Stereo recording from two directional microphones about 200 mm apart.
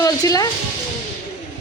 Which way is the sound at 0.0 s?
15° left (ahead or behind).